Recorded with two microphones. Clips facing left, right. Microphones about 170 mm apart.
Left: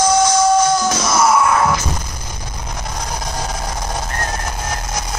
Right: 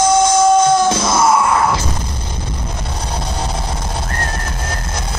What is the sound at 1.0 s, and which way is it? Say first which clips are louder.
Music: right 1 dB; 25° right (ahead or behind).